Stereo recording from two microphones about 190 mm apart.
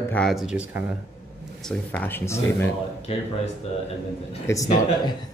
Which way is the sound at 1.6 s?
10° left (ahead or behind).